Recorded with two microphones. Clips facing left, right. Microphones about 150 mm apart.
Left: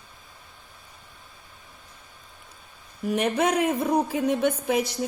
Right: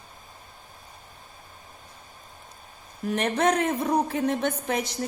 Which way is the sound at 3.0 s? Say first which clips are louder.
Left 1 dB; 5° left (ahead or behind).